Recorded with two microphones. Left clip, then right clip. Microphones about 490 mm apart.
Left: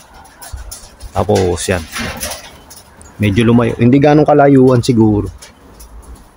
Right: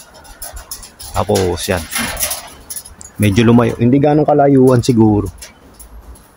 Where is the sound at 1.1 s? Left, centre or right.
Right.